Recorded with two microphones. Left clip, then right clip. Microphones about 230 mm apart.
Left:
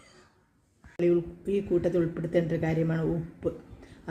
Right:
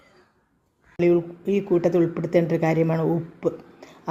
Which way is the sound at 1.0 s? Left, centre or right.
Centre.